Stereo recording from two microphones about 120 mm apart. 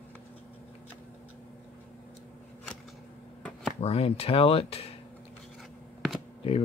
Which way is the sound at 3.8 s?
60° left (ahead or behind).